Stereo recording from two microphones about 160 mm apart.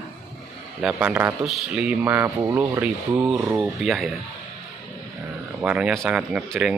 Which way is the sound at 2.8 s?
10° right (ahead or behind).